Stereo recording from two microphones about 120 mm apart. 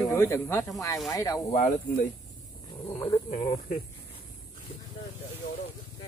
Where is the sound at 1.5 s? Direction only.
90° left.